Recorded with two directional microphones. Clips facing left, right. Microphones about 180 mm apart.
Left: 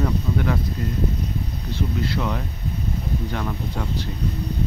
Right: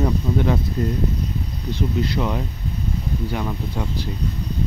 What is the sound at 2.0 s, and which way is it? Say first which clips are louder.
Speech: right 2 dB; 15° right (ahead or behind).